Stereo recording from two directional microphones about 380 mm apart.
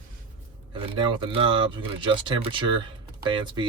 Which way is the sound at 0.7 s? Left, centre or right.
Centre.